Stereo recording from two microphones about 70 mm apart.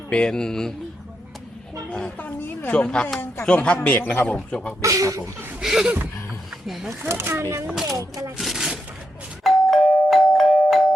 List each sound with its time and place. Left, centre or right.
0.1 s speech: centre
1.9 s a woman's voice: centre
2.1 s speech: left
2.7 s speech: centre
4.8 s speech: right
5.5 s speech: centre
7.0 s speech: right
7.9 s speech: right
8.4 s a sound: centre
9.4 s doorbell: centre